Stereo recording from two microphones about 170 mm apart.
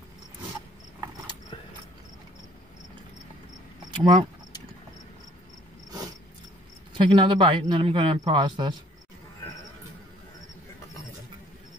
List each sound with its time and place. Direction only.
4.0 s speech: 30° right (ahead or behind)
5.9 s a sound: 25° right (ahead or behind)
6.9 s speech: 30° right (ahead or behind)